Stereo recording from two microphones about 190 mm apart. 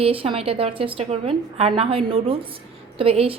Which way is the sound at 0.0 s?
30° right (ahead or behind).